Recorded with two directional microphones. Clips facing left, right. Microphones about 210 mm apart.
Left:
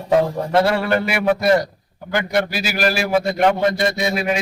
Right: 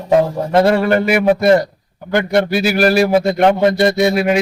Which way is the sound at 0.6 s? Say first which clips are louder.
Right 5 dB; 45° right (ahead or behind).